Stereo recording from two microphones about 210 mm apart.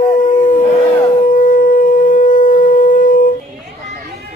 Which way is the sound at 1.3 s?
40° left (ahead or behind).